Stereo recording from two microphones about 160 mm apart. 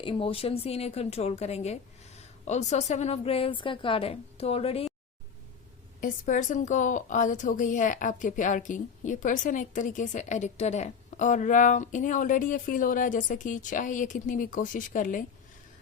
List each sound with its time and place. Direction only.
0.0 s a woman's voice: 35° left (ahead or behind)
6.0 s a woman's voice: 55° left (ahead or behind)